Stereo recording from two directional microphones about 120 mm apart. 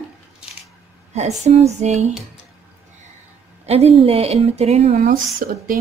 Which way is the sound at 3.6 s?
60° right (ahead or behind).